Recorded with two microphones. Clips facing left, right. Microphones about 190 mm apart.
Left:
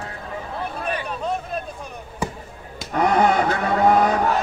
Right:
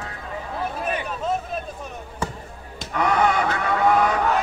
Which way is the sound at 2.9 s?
40° left (ahead or behind).